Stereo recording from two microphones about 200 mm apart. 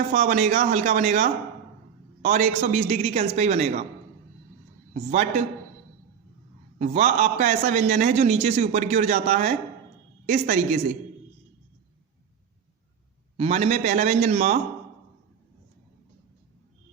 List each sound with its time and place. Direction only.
0.1 s a man's voice: 40° right (ahead or behind)
5.1 s a man's voice: 35° right (ahead or behind)
6.7 s a man's voice: 35° right (ahead or behind)
13.3 s a man's voice: 30° right (ahead or behind)